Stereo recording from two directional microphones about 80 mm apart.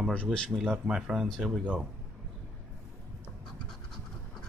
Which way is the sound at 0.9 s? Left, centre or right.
Centre.